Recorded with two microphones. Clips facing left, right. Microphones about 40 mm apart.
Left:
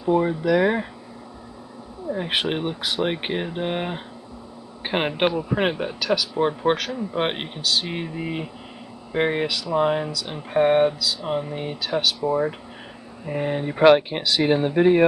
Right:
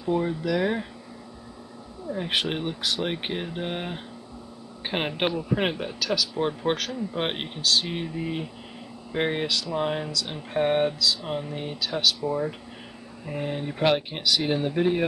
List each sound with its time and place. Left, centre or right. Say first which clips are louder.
0.0 s speech: left 5 dB; left
2.0 s speech: left 3 dB; centre
9.1 s speech: left 3 dB; centre; by 15.0 s left